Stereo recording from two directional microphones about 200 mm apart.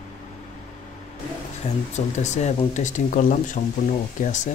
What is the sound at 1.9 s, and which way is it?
Speech, 35° left (ahead or behind).